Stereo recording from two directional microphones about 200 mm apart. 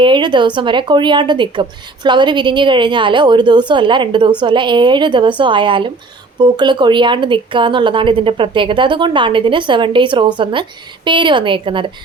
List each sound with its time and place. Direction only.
0.0 s speech: 25° right (ahead or behind)